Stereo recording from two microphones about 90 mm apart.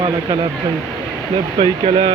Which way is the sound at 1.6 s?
85° right.